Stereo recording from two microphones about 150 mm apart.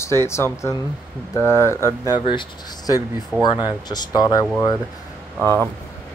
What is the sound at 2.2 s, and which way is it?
Speech, 30° left (ahead or behind).